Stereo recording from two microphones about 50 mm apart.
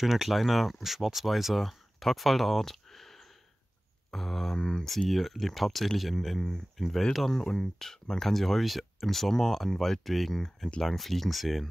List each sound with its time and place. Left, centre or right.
0.0 s speech: centre
4.1 s a sound: centre
4.8 s speech: centre